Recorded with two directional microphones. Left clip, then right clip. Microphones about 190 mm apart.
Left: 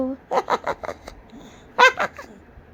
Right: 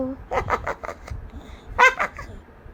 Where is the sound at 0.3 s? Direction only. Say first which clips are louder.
Left 2 dB; 20° left (ahead or behind).